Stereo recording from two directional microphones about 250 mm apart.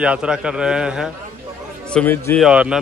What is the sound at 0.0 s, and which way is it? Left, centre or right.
A man's voice, centre.